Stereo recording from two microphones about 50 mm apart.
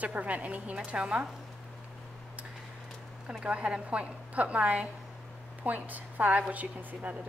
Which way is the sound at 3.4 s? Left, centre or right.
Right.